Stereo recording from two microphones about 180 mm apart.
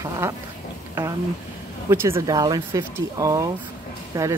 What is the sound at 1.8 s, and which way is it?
Speech, 15° right (ahead or behind).